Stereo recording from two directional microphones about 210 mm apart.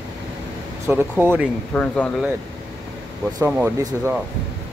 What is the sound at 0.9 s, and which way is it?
Speech, 10° right (ahead or behind).